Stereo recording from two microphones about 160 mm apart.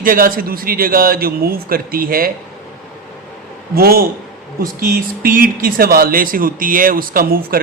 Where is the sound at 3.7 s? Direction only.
70° right (ahead or behind).